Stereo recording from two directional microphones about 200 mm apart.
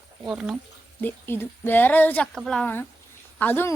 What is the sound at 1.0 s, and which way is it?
Speech, 10° left (ahead or behind).